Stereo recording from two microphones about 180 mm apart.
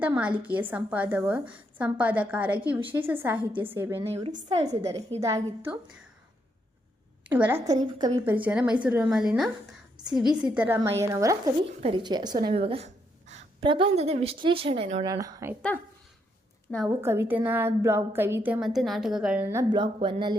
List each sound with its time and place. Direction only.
0.0 s a woman's voice: 10° right (ahead or behind)
4.1 s a woman's voice: 45° right (ahead or behind)
4.8 s a woman's voice: 15° right (ahead or behind)
7.3 s a woman's voice: 10° right (ahead or behind)
11.6 s a woman's voice: 30° right (ahead or behind)
15.1 s a woman's voice: 15° right (ahead or behind)
17.0 s a woman's voice: 15° right (ahead or behind)
19.7 s a woman's voice: 25° right (ahead or behind)